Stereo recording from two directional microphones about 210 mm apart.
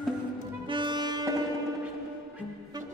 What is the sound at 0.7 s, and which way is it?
Music, 20° right (ahead or behind).